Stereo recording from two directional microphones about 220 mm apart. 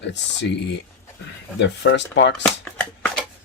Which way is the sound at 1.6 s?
55° left (ahead or behind).